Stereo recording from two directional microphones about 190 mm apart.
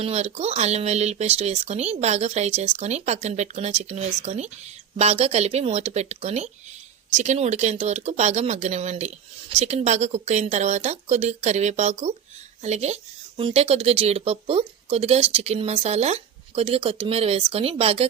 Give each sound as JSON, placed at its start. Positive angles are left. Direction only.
{"t": 0.0, "sound": "speech", "side_deg": -35}